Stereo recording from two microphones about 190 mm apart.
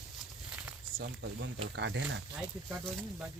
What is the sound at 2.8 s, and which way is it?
Speech, 5° left (ahead or behind).